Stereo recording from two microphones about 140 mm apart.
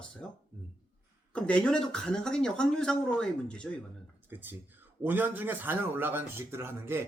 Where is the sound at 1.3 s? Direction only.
10° left (ahead or behind).